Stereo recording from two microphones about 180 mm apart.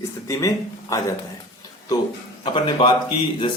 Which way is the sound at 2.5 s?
25° left (ahead or behind).